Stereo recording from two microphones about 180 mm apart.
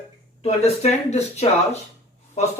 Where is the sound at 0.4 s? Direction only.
35° left (ahead or behind).